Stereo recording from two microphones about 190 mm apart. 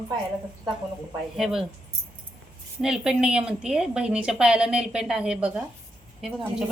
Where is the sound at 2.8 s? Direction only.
5° right (ahead or behind).